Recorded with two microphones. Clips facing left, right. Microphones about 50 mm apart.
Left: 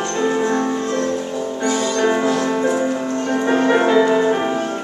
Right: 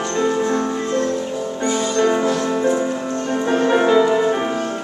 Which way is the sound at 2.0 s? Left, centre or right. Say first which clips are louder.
Right 1 dB; centre.